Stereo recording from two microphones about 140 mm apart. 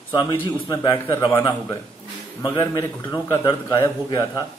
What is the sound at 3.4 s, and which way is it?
A man's voice, 30° left (ahead or behind).